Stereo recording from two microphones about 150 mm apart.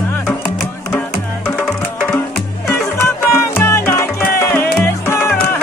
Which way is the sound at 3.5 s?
15° left (ahead or behind).